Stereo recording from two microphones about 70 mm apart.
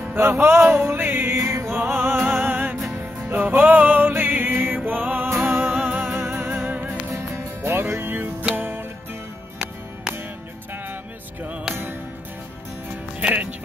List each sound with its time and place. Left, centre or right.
0.1 s music: right
13.3 s music: centre